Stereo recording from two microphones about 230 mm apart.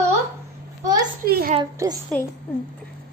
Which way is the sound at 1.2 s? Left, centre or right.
Right.